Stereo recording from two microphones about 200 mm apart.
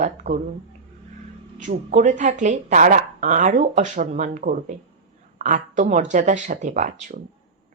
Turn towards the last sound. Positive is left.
turn(degrees=-40)  # may be behind; listen again after turning